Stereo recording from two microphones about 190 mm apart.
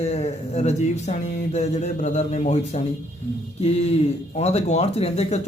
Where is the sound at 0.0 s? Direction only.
35° left (ahead or behind).